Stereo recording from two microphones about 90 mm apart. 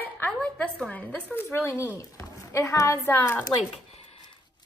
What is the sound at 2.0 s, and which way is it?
A woman's voice, 40° left (ahead or behind).